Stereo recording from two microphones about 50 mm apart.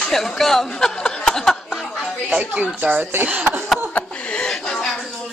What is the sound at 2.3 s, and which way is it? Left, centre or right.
Speech, right.